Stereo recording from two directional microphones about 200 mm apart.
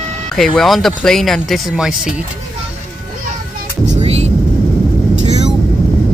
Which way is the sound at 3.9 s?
30° right (ahead or behind).